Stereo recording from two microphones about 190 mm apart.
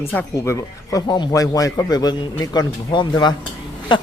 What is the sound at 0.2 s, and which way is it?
Speech, 15° left (ahead or behind).